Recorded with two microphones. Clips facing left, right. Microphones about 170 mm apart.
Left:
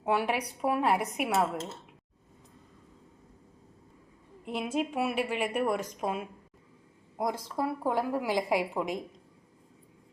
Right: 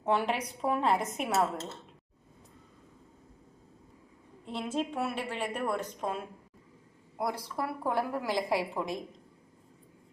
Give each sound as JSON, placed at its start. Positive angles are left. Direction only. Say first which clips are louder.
{"t": 0.0, "sound": "a woman's voice", "louder": "left 1 dB", "side_deg": 10}
{"t": 4.4, "sound": "a woman's voice", "louder": "left 2 dB", "side_deg": 10}